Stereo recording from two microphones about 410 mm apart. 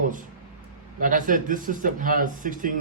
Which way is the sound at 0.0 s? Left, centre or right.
Centre.